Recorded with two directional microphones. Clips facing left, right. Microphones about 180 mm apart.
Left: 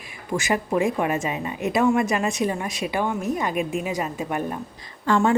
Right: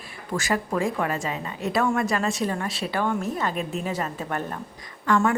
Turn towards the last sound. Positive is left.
turn(degrees=30)  # may be behind; listen again after turning